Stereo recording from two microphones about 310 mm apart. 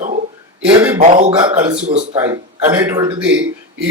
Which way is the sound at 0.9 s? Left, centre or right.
Right.